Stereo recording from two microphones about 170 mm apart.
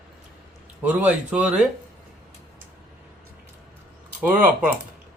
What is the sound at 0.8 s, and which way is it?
Speech, 10° right (ahead or behind).